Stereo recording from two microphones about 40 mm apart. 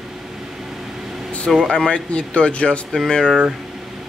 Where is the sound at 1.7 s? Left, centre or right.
Left.